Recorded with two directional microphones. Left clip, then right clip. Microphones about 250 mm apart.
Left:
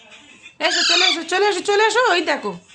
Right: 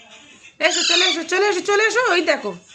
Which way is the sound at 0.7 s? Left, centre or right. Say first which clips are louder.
Left 3 dB; left.